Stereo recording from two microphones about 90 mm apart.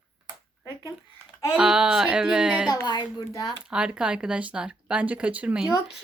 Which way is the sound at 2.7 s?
40° left (ahead or behind).